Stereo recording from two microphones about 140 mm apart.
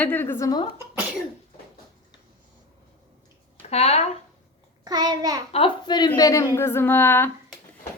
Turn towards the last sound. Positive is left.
turn(degrees=15)  # may be behind; listen again after turning